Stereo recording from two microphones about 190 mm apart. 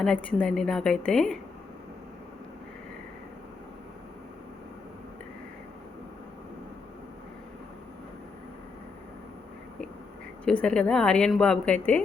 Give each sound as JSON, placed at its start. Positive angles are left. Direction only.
{"t": 0.0, "sound": "a woman's voice", "side_deg": 5}
{"t": 10.4, "sound": "a woman's voice", "side_deg": 5}